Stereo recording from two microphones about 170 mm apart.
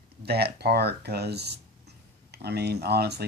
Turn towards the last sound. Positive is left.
turn(degrees=-75)  # may be behind; listen again after turning